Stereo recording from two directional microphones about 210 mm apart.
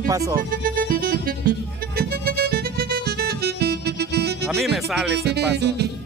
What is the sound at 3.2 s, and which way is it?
Music, 50° right (ahead or behind).